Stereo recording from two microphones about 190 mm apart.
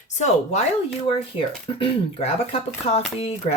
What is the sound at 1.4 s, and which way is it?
Speech, 30° left (ahead or behind).